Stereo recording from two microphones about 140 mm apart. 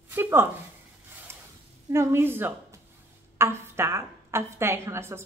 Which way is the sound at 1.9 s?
20° right (ahead or behind).